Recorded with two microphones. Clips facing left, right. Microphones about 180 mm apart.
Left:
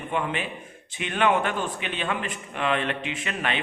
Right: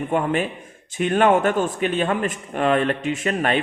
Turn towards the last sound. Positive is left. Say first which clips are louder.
# right 8 dB
turn(degrees=-45)  # may be behind; listen again after turning